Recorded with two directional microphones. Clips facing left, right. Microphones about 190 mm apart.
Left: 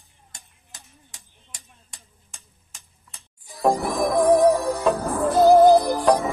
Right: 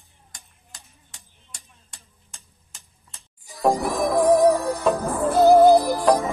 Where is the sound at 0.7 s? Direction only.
20° left (ahead or behind).